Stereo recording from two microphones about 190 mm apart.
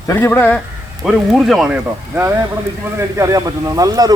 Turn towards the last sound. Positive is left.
turn(degrees=-20)  # may be behind; listen again after turning